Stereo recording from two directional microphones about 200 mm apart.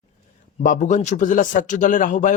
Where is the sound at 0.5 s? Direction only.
40° left (ahead or behind).